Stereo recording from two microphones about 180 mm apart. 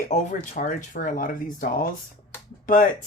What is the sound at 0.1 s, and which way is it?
Speech, 40° left (ahead or behind).